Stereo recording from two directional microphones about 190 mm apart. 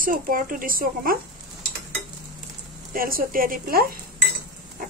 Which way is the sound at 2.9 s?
50° right (ahead or behind).